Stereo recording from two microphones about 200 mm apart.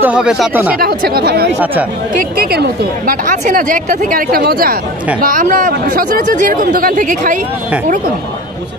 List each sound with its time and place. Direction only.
0.0 s speech: 5° right (ahead or behind)
0.7 s a woman's voice: 50° right (ahead or behind)